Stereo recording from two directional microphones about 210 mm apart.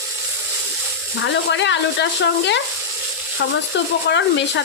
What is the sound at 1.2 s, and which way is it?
Speech, 60° left (ahead or behind).